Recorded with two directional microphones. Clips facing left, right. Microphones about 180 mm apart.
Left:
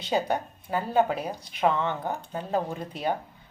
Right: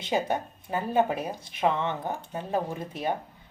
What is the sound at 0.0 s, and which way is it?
Speech, 25° right (ahead or behind).